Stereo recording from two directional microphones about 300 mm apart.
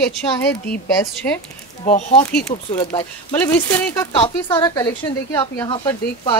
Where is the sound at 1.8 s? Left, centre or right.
Left.